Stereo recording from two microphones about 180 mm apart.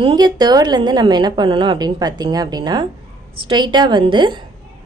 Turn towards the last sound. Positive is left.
turn(degrees=-25)  # may be behind; listen again after turning